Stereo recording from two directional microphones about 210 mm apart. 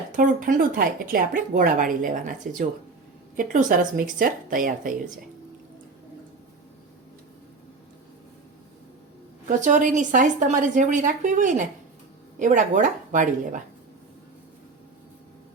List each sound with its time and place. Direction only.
0.2 s speech: 40° right (ahead or behind)
9.6 s speech: 35° right (ahead or behind)